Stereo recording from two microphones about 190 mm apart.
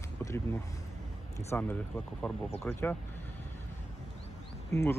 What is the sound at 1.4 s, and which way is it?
Speech, 10° left (ahead or behind).